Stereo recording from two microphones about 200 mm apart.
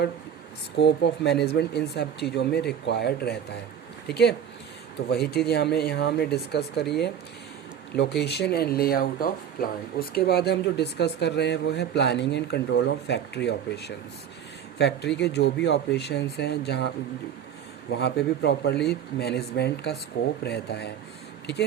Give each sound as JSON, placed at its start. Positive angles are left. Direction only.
{"t": 0.8, "sound": "speech", "side_deg": 60}
{"t": 8.2, "sound": "speech", "side_deg": 55}
{"t": 17.9, "sound": "speech", "side_deg": 55}